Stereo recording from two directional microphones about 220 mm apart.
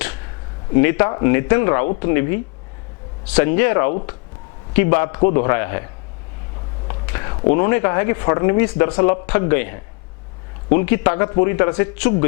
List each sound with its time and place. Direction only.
0.7 s speech: 15° left (ahead or behind)
7.1 s speech: 20° left (ahead or behind)